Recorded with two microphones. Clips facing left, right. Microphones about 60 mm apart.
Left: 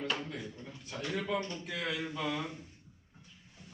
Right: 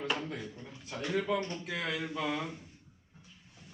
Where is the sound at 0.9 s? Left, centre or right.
Centre.